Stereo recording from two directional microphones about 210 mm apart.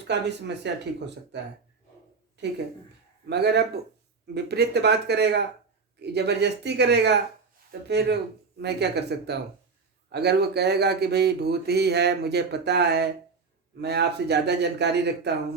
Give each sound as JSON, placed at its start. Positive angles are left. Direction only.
{"t": 0.1, "sound": "speech", "side_deg": -55}
{"t": 3.2, "sound": "speech", "side_deg": -50}